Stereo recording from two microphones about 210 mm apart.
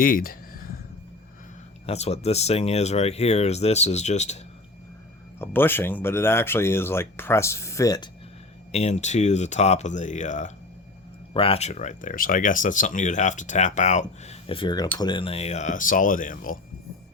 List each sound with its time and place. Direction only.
0.0 s a sound: 45° left (ahead or behind)
1.9 s speech: 30° left (ahead or behind)
5.4 s speech: 10° left (ahead or behind)
8.7 s speech: 30° left (ahead or behind)